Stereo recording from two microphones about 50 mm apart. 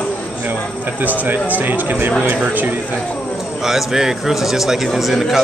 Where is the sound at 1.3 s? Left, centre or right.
Right.